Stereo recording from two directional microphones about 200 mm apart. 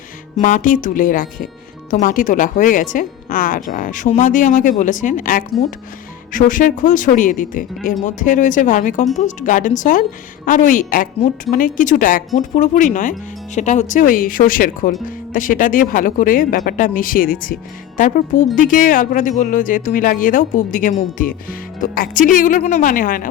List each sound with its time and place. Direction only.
0.3 s speech: 40° left (ahead or behind)